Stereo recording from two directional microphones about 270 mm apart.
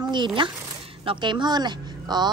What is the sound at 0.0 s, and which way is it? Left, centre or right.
Speech, centre.